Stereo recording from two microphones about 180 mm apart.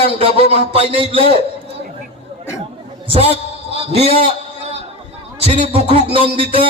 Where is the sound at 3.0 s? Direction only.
30° right (ahead or behind).